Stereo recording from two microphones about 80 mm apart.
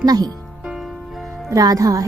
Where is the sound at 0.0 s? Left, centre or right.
Right.